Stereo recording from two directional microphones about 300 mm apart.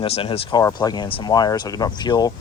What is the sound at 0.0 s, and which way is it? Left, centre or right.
Speech, centre.